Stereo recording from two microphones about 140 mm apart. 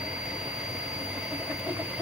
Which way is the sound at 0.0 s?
5° right (ahead or behind).